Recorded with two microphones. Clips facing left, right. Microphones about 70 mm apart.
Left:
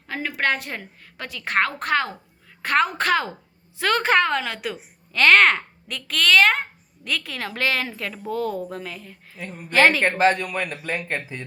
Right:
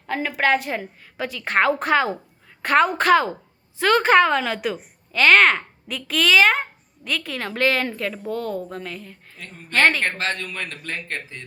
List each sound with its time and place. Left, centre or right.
0.1 s a woman's voice: centre
9.4 s speech: centre